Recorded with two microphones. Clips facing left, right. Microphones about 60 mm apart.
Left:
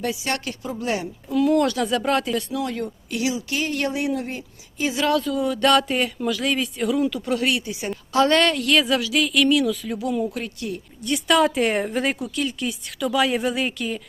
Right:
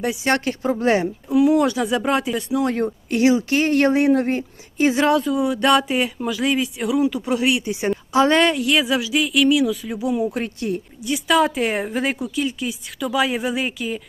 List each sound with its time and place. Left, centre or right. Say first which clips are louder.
0.3 s speech: right 7 dB; right
1.3 s speech: right 3 dB; centre
2.6 s speech: right 6 dB; right
5.0 s speech: right 3 dB; right
7.6 s a woman's voice: right 7 dB; right
8.1 s speech: right 1 dB; centre
10.3 s speech: right 5 dB; right
11.0 s speech: right 1 dB; centre